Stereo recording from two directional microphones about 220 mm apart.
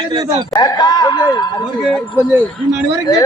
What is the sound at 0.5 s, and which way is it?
Speech, 20° left (ahead or behind).